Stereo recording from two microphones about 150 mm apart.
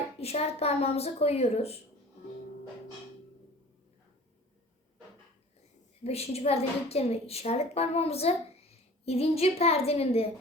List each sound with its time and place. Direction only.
0.2 s a woman's voice: 45° left (ahead or behind)
6.0 s a woman's voice: 45° left (ahead or behind)